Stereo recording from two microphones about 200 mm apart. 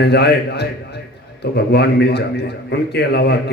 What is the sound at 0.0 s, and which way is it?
A man's voice, 55° left (ahead or behind).